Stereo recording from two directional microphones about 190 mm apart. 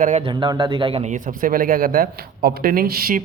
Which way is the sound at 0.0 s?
40° right (ahead or behind).